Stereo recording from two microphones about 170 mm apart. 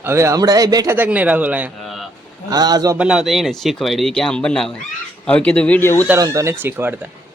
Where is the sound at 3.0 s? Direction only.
5° right (ahead or behind); by 6.1 s 15° left (ahead or behind).